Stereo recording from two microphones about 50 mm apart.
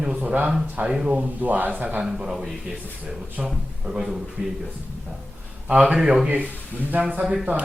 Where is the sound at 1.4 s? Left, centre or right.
Right.